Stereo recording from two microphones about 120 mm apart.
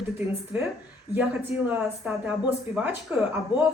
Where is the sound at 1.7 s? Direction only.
10° right (ahead or behind).